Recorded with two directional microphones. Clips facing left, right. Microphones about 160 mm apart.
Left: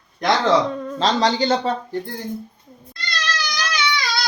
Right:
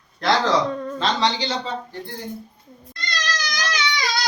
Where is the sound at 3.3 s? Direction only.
45° right (ahead or behind).